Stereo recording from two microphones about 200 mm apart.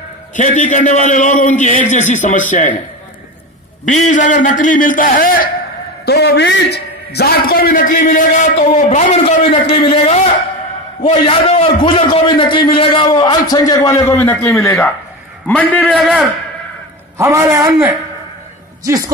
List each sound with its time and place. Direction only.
0.4 s a man's voice: 35° left (ahead or behind)
3.8 s a man's voice: 40° left (ahead or behind)
6.0 s a man's voice: 55° left (ahead or behind); by 16.1 s 5° left (ahead or behind)
17.2 s a man's voice: 15° right (ahead or behind)